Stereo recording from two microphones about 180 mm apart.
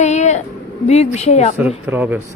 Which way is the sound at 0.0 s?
40° left (ahead or behind).